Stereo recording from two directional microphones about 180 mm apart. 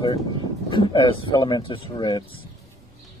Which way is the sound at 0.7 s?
25° left (ahead or behind).